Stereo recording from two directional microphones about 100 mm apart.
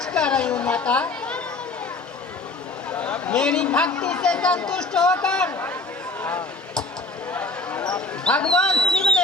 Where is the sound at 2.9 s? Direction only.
15° left (ahead or behind).